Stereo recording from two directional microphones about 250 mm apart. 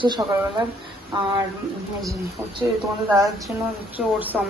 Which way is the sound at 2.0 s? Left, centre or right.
Centre.